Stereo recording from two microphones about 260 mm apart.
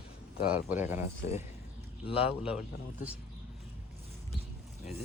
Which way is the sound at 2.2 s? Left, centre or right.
Centre.